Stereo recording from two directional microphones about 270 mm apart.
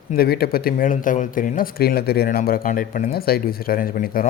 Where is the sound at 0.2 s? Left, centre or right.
Left.